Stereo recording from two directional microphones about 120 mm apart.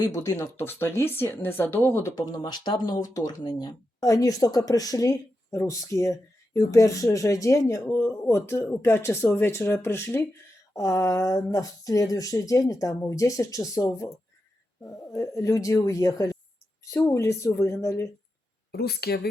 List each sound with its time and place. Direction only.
0.0 s speech: 25° left (ahead or behind)